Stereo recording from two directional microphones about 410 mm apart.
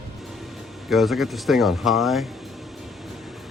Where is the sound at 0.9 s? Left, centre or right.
Centre.